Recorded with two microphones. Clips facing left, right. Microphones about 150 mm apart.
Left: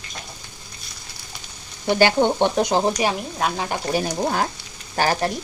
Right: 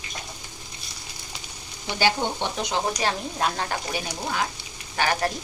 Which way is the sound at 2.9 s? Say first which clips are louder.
Left 3 dB; 5° left (ahead or behind).